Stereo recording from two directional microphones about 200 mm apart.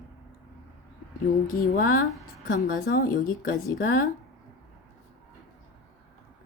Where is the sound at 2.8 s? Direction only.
45° left (ahead or behind).